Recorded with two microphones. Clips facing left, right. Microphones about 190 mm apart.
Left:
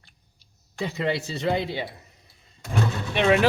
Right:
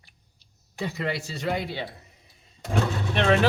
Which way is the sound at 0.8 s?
25° left (ahead or behind).